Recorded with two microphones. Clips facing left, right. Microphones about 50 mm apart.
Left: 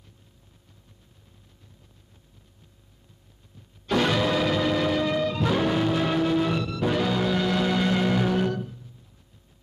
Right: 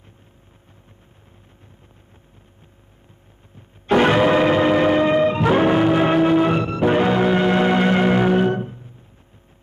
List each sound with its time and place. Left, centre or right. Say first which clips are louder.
3.5 s music: right 8 dB; right